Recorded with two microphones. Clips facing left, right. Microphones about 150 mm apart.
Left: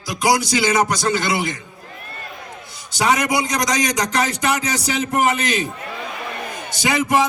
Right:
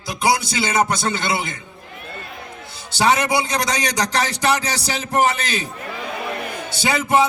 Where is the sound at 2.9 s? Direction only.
30° right (ahead or behind).